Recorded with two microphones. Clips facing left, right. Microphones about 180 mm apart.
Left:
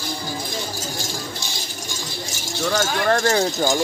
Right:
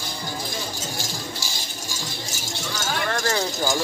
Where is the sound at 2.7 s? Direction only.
50° left (ahead or behind).